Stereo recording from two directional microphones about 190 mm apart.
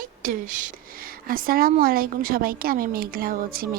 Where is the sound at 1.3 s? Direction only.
50° right (ahead or behind).